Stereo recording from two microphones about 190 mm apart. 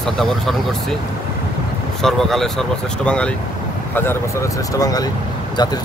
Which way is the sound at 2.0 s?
Centre (ahead or behind).